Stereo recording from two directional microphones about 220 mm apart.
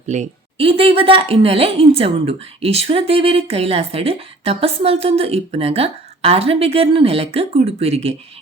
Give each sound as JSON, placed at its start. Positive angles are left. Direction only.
{"t": 0.1, "sound": "a woman's voice", "side_deg": -30}